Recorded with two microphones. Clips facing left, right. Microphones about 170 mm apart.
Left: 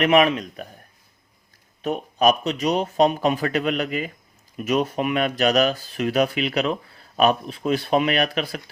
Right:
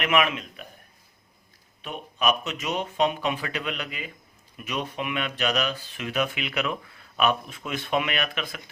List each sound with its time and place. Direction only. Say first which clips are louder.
0.0 s speech: left 7 dB; 35° left (ahead or behind)
1.8 s speech: left 8 dB; 40° left (ahead or behind)